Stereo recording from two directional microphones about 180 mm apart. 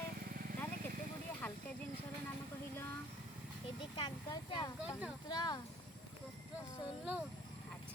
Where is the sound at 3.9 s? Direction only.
25° left (ahead or behind).